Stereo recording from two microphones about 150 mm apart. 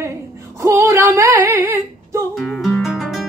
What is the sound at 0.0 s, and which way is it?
Female singing, 20° right (ahead or behind).